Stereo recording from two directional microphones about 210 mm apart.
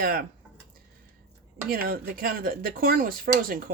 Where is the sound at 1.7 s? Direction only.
45° right (ahead or behind).